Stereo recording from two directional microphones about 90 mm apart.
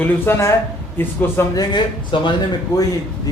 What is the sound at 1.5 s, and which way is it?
Speech, 60° left (ahead or behind).